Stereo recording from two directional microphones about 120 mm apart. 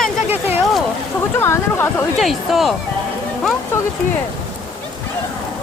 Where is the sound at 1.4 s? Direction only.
20° left (ahead or behind).